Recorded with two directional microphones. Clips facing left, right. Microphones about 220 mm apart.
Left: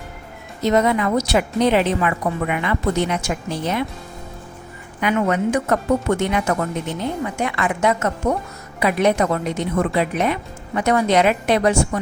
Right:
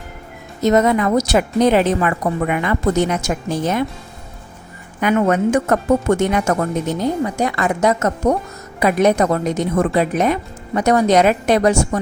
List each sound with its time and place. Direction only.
0.6 s a woman's voice: 45° right (ahead or behind)
4.9 s a woman's voice: 45° right (ahead or behind)